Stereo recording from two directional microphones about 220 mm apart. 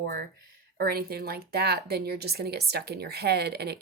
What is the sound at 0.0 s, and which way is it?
Speech, 45° right (ahead or behind).